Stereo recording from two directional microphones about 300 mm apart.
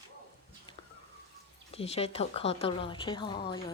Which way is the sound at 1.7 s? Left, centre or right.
Centre.